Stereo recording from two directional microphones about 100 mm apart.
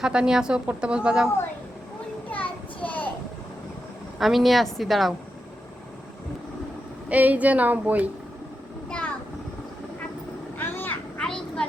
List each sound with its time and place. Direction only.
0.0 s speech: 5° right (ahead or behind)
2.3 s a sound: 15° left (ahead or behind)
4.2 s a woman's voice: centre (ahead or behind)
7.1 s speech: 15° right (ahead or behind)
8.9 s a sound: 10° left (ahead or behind)
10.6 s vehicle: 20° left (ahead or behind)
11.2 s vehicle: 10° left (ahead or behind)